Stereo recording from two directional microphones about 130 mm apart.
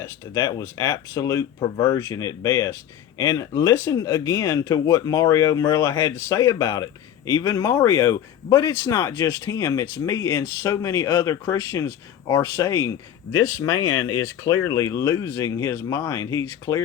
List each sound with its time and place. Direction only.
0.0 s speech: 25° left (ahead or behind)